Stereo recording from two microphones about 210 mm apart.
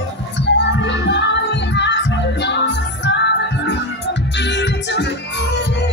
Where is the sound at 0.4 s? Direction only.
55° left (ahead or behind).